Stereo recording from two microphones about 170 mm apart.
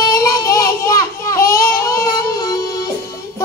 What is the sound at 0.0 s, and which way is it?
Child singing, 20° left (ahead or behind).